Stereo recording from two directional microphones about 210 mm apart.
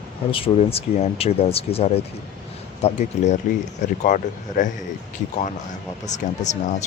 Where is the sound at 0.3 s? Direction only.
25° left (ahead or behind).